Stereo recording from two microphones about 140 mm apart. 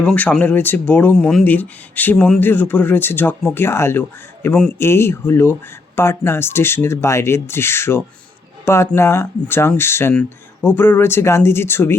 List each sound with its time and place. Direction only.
0.0 s speech: 10° left (ahead or behind)